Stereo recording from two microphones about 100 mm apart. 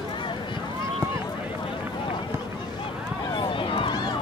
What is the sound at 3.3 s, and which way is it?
Run, 55° left (ahead or behind).